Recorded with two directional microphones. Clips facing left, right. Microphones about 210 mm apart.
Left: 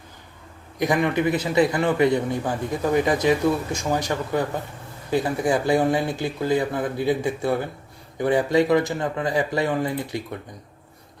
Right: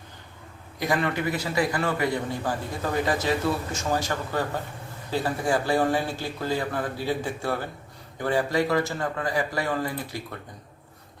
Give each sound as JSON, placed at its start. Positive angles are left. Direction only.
{"t": 0.8, "sound": "speech", "side_deg": 15}